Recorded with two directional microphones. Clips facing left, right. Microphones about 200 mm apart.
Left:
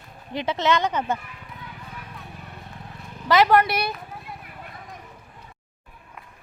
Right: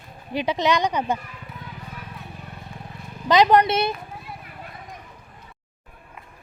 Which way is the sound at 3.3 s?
20° right (ahead or behind).